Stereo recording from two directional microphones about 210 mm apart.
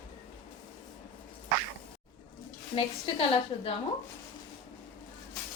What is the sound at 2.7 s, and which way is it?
A woman's voice, 25° left (ahead or behind).